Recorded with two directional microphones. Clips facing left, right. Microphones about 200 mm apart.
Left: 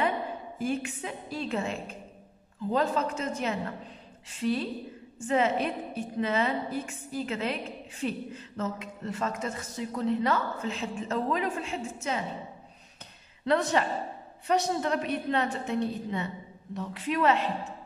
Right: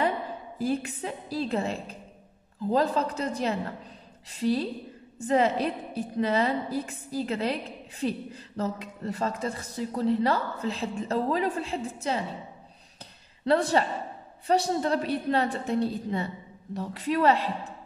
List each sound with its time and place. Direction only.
0.6 s a woman's voice: 35° right (ahead or behind)
13.5 s a woman's voice: 35° right (ahead or behind)